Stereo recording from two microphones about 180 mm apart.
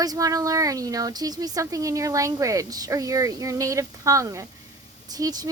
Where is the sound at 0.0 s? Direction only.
20° right (ahead or behind).